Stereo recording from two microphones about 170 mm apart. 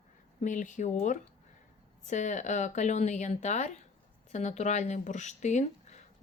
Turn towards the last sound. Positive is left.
turn(degrees=45)  # may be behind; listen again after turning